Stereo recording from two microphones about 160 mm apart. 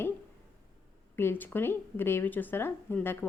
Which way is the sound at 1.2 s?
15° left (ahead or behind).